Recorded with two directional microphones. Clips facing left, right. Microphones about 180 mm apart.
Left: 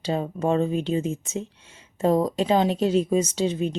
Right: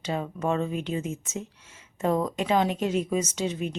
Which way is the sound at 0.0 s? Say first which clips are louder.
Left 4 dB; 30° left (ahead or behind).